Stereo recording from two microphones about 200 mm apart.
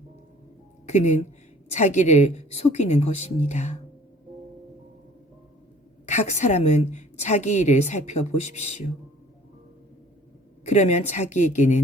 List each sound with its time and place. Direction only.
0.9 s a woman's voice: 35° left (ahead or behind)
6.1 s a woman's voice: 35° left (ahead or behind)
10.7 s a woman's voice: 35° left (ahead or behind)